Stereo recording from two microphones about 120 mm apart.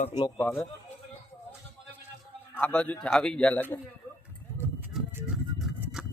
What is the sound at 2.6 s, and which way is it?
A man's voice, 10° left (ahead or behind).